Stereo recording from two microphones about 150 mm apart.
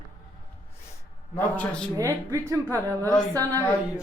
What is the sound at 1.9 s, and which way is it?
A woman's voice, 20° right (ahead or behind).